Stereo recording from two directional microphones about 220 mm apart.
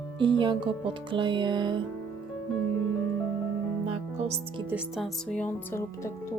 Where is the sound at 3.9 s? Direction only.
30° right (ahead or behind).